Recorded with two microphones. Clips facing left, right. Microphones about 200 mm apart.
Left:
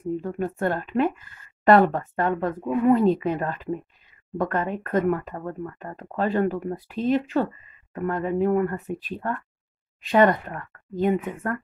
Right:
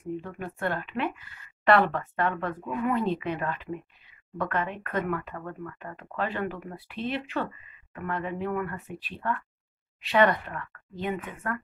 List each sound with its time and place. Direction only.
0.2 s speech: 40° left (ahead or behind)